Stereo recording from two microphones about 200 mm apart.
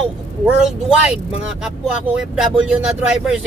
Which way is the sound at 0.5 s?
Centre (ahead or behind).